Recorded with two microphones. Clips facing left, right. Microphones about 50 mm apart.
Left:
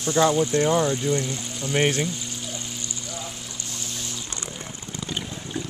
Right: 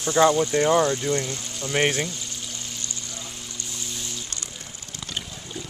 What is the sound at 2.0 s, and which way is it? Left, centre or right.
Pour, centre.